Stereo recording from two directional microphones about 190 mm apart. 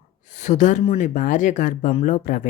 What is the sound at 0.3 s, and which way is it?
Speech, 40° left (ahead or behind).